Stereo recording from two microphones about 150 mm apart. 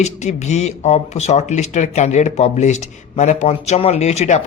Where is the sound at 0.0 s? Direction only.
50° left (ahead or behind).